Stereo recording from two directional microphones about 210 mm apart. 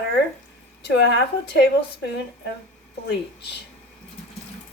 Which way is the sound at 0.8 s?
50° left (ahead or behind).